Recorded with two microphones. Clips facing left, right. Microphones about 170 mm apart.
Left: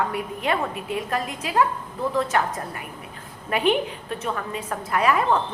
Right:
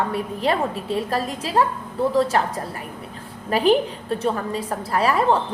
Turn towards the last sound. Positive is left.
turn(degrees=-35)  # may be behind; listen again after turning